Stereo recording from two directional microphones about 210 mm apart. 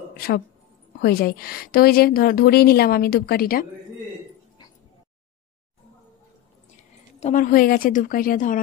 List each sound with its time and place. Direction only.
1.0 s a woman's voice: 45° left (ahead or behind)
7.2 s a woman's voice: 35° left (ahead or behind)